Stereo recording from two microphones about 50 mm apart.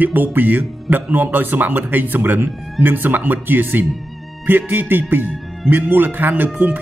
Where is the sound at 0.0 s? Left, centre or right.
Right.